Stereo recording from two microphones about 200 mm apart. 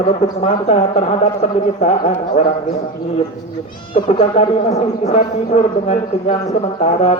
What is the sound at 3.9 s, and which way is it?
Speech, 30° left (ahead or behind).